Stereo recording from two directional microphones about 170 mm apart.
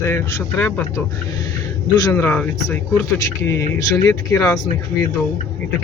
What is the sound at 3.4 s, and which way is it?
Speech, 20° left (ahead or behind).